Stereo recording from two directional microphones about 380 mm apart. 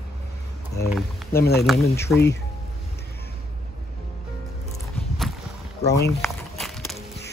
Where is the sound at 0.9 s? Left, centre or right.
Centre.